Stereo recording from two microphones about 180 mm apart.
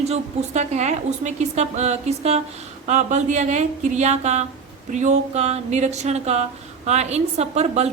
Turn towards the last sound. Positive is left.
turn(degrees=-40)  # may be behind; listen again after turning